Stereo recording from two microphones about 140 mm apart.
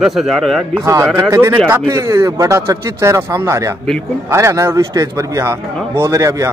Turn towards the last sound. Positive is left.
turn(degrees=-25)  # may be behind; listen again after turning